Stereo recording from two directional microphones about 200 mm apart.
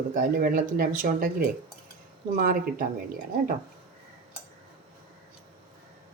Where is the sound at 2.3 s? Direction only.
45° right (ahead or behind).